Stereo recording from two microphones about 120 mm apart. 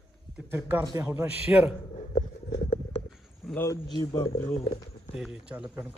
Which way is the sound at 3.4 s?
5° left (ahead or behind).